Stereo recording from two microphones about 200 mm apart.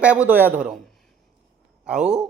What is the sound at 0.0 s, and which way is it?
Speech, 5° right (ahead or behind).